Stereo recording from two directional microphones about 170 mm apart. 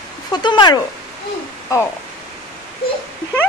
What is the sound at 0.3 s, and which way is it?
Speech, 25° left (ahead or behind).